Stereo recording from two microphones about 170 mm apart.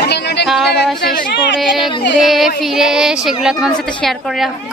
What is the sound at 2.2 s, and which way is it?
A woman's voice, centre (ahead or behind).